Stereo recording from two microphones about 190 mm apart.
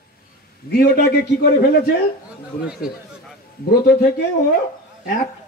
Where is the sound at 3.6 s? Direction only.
55° left (ahead or behind).